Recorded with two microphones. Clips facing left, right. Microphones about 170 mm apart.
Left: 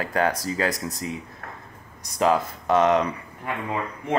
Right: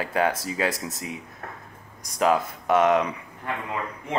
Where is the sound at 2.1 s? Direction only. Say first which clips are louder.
Left 1 dB; 10° right (ahead or behind).